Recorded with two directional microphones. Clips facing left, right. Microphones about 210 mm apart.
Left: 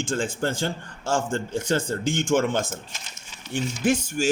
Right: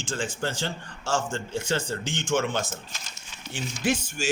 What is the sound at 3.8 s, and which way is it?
Speech, 55° left (ahead or behind).